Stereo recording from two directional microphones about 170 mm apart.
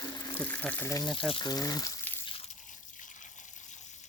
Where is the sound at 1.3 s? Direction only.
25° left (ahead or behind).